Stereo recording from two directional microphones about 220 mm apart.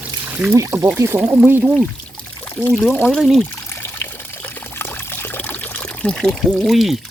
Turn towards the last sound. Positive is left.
turn(degrees=0)  # may be behind; listen again after turning